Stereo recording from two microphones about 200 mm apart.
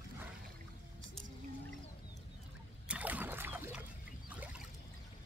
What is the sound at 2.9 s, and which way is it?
Rowboat, 5° right (ahead or behind).